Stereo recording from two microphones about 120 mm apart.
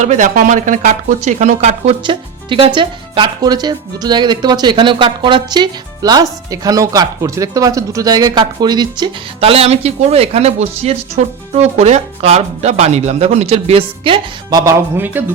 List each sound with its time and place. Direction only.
0.0 s speech: 90° right
2.0 s speech: 40° right (ahead or behind)
9.4 s speech: 55° right (ahead or behind)
14.5 s speech: 25° right (ahead or behind)